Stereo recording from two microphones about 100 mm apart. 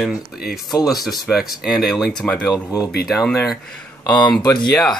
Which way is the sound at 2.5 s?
35° left (ahead or behind).